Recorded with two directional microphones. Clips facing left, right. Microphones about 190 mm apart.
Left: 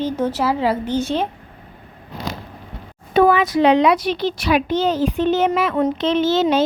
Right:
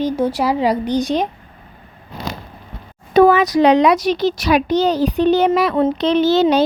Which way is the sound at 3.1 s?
40° right (ahead or behind).